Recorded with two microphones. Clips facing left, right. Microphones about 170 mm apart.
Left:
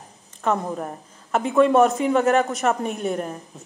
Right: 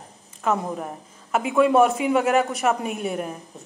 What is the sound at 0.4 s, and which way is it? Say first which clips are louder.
A man's voice: left 1 dB; 5° right (ahead or behind).